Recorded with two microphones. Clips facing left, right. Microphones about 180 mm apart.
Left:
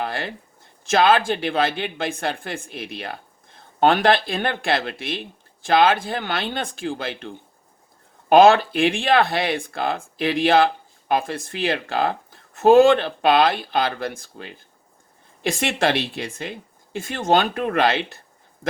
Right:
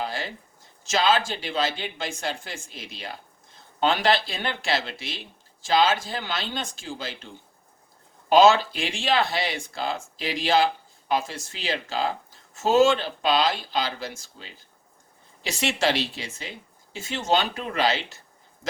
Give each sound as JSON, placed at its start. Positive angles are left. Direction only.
{"t": 0.0, "sound": "speech", "side_deg": 60}